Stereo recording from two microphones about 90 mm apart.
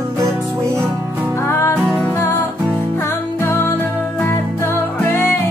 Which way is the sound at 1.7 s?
20° right (ahead or behind).